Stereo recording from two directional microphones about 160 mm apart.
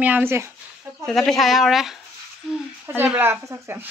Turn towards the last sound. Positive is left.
turn(degrees=-15)  # may be behind; listen again after turning